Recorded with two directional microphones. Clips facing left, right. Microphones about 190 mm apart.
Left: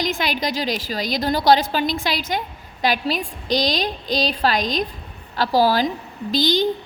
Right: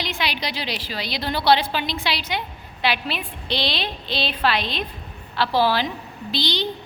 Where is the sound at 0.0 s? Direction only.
45° left (ahead or behind).